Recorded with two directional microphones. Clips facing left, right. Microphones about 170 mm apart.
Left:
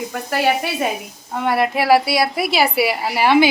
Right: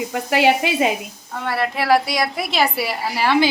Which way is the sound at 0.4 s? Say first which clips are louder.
Right 2 dB; 15° right (ahead or behind).